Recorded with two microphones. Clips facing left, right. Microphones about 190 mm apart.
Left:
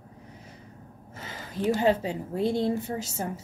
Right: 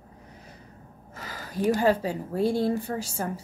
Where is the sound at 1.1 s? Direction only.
25° left (ahead or behind).